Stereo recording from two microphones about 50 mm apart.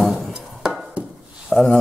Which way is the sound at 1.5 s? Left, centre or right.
Centre.